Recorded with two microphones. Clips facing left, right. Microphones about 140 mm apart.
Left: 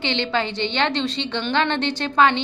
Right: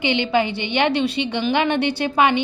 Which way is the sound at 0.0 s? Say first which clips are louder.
Right 4 dB; 10° right (ahead or behind).